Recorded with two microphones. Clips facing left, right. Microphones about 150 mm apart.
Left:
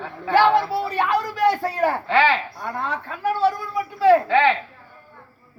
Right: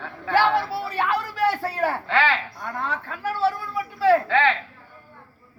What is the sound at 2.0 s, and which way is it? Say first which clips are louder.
A woman's voice: left 3 dB; 5° left (ahead or behind).